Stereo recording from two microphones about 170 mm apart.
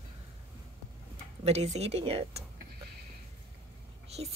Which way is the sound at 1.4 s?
40° right (ahead or behind).